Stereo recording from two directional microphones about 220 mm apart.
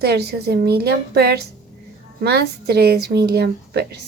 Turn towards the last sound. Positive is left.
turn(degrees=-50)  # may be behind; listen again after turning